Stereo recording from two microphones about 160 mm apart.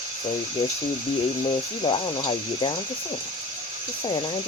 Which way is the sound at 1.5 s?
35° left (ahead or behind).